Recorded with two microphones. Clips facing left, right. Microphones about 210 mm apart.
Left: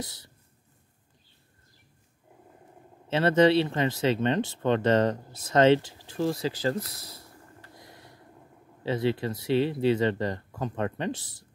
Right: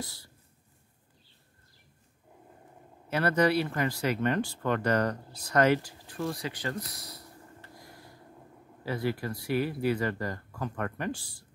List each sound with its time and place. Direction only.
0.0 s speech: 20° left (ahead or behind)
3.1 s speech: 25° left (ahead or behind)
7.7 s a sound: 20° left (ahead or behind)
8.8 s speech: 25° left (ahead or behind)